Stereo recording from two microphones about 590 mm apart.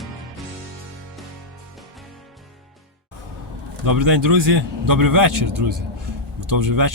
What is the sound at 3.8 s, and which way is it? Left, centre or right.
A man's voice, right.